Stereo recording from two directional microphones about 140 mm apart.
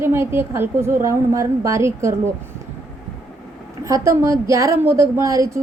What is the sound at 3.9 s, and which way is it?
A woman's voice, 20° right (ahead or behind).